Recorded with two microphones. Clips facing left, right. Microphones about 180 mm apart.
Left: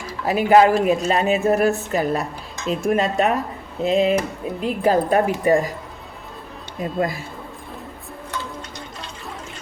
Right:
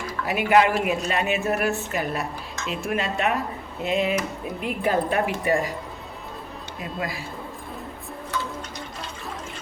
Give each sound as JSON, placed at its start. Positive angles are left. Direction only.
{"t": 0.3, "sound": "a woman's voice", "side_deg": 35}
{"t": 6.8, "sound": "speech", "side_deg": 45}